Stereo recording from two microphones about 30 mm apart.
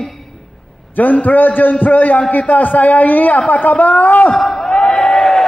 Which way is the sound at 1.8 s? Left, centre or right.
Left.